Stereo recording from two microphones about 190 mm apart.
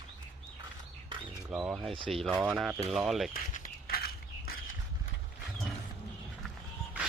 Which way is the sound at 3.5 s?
55° left (ahead or behind).